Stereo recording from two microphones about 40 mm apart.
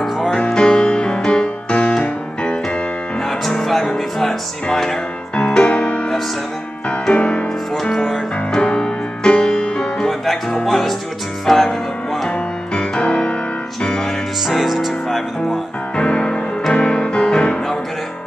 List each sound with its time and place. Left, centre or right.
0.5 s music: centre
3.3 s music: centre; by 6.0 s left
7.2 s music: left
8.5 s music: left; by 12.3 s centre
12.3 s music: left
14.5 s music: centre
16.0 s music: left